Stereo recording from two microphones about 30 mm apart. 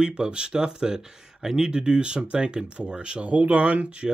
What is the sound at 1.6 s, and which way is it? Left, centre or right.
Speech, right.